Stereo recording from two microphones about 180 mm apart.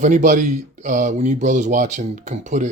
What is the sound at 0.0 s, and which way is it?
A man's voice, 45° right (ahead or behind).